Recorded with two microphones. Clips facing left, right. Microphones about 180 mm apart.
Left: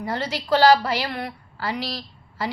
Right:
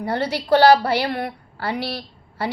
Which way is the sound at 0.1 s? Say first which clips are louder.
Right 4 dB; 60° right (ahead or behind).